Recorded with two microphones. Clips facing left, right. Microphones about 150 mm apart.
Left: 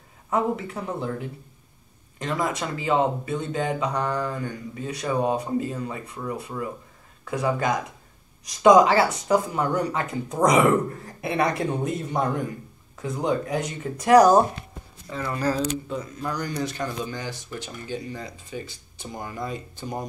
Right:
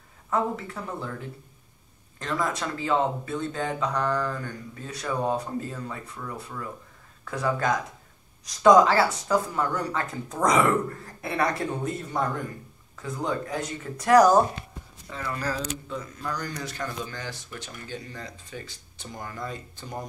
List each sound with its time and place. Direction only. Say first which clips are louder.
0.3 s speech: left 3 dB; 15° left (ahead or behind)
15.2 s speech: left 6 dB; 30° left (ahead or behind)